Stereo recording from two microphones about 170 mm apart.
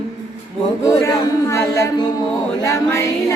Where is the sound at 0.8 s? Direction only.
20° left (ahead or behind).